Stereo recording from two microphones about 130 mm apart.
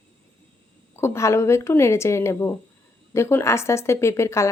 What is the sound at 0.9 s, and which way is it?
A woman's voice, 20° left (ahead or behind).